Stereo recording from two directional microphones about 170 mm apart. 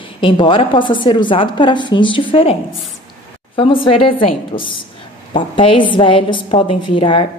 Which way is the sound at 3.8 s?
30° left (ahead or behind).